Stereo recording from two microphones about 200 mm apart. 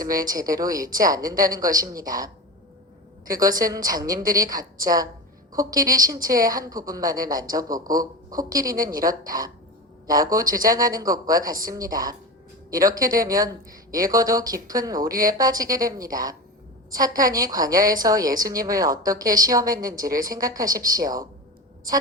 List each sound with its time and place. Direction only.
0.0 s a woman's voice: 20° right (ahead or behind)
10.2 s speech: 20° right (ahead or behind)